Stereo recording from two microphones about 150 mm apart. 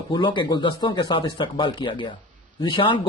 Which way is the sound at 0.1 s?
30° left (ahead or behind).